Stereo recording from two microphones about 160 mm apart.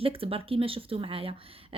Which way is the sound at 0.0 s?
35° right (ahead or behind).